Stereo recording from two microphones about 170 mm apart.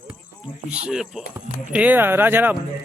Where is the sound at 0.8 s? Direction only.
5° right (ahead or behind).